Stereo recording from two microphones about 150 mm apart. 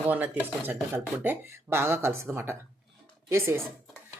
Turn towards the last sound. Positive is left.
turn(degrees=-15)  # may be behind; listen again after turning